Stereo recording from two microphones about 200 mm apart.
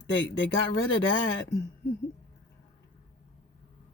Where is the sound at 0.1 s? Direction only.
65° left (ahead or behind).